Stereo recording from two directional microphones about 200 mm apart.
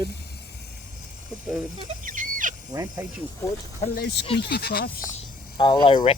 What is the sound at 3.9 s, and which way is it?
Speech, 55° left (ahead or behind).